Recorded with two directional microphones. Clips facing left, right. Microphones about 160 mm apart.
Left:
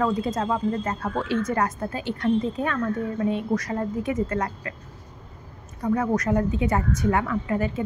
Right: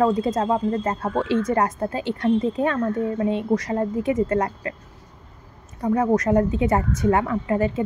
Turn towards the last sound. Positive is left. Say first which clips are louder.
# right 3 dB
turn(degrees=-25)  # may be behind; listen again after turning